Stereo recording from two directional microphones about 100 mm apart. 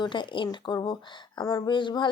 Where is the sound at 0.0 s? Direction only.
55° left (ahead or behind).